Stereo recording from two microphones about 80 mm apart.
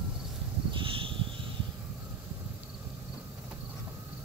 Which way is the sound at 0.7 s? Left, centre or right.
Right.